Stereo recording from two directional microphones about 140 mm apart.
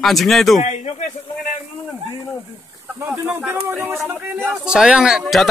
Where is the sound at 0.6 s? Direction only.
55° left (ahead or behind).